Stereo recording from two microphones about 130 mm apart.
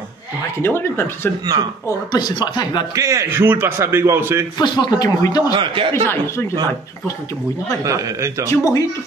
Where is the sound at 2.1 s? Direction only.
30° left (ahead or behind).